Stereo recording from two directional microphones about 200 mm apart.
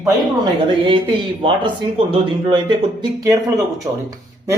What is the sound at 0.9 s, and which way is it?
Speech, 25° right (ahead or behind).